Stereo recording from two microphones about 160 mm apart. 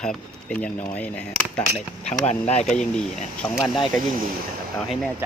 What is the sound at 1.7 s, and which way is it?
Speech, 40° left (ahead or behind).